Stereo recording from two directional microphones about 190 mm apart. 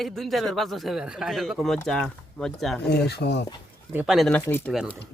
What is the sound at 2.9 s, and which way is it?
Speech, 60° left (ahead or behind).